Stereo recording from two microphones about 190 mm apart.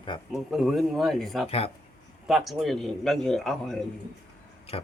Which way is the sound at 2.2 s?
Centre (ahead or behind).